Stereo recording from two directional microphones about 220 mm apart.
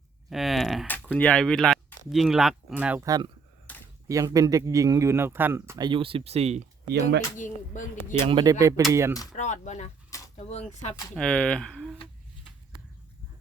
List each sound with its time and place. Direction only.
0.3 s speech: centre (ahead or behind); by 3.3 s 15° right (ahead or behind)
3.7 s a sound: 5° left (ahead or behind)
4.1 s speech: 15° right (ahead or behind)
7.3 s speech: 35° left (ahead or behind)
8.3 s speech: 20° right (ahead or behind)
9.3 s speech: 30° left (ahead or behind)
11.1 s speech: 5° left (ahead or behind)